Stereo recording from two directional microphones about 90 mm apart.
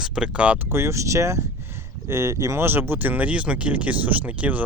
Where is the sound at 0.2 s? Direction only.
15° right (ahead or behind).